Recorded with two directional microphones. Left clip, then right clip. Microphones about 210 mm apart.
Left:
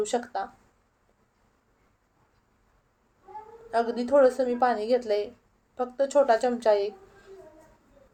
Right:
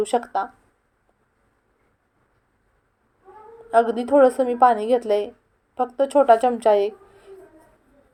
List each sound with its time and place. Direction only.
0.0 s speech: 20° right (ahead or behind)
3.7 s a woman's voice: 20° right (ahead or behind)